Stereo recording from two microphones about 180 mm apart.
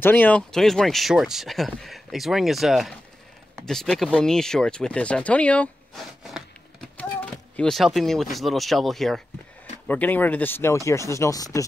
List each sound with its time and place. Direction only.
0.0 s speech: 10° left (ahead or behind)